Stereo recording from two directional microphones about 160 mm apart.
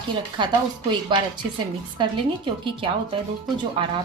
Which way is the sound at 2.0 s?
30° right (ahead or behind).